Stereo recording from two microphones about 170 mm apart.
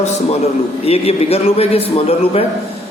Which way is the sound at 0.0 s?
40° left (ahead or behind).